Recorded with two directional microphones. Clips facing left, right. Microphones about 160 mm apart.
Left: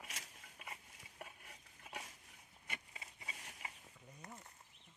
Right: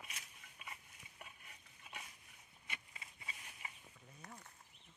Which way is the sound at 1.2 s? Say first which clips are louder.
Left 5 dB; 40° left (ahead or behind).